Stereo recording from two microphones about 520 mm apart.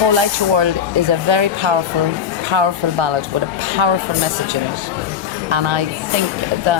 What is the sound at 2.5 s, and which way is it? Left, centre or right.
Speech, right.